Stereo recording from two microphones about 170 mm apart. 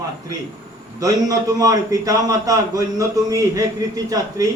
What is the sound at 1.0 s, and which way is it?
A man's voice, 20° right (ahead or behind).